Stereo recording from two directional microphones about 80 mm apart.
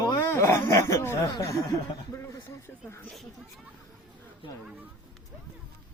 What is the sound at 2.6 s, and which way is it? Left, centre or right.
Speech, left.